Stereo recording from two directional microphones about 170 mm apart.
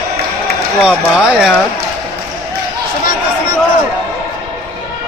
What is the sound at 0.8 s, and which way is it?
Speech, 5° right (ahead or behind).